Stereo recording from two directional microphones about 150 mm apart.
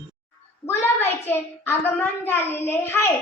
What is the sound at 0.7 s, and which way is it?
A child's voice, 15° left (ahead or behind).